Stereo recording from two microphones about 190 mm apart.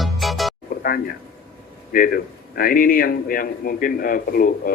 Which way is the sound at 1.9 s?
50° left (ahead or behind).